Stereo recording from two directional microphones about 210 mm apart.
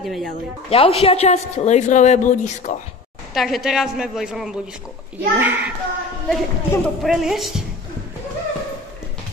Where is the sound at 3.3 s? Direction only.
Centre (ahead or behind).